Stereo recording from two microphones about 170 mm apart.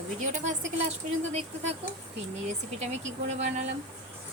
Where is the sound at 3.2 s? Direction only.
40° right (ahead or behind).